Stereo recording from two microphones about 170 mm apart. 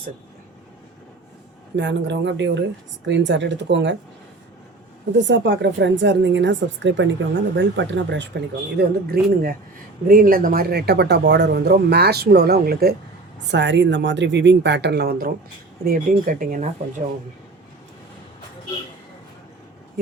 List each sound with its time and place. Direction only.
1.7 s a woman's voice: 90° right
5.1 s a woman's voice: 90° right
8.8 s speech: 65° right (ahead or behind)
13.5 s a woman's voice: 90° right; by 15.3 s 70° right (ahead or behind)
15.8 s speech: 55° right (ahead or behind)